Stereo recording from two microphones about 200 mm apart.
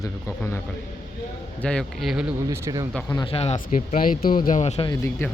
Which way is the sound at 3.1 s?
25° left (ahead or behind).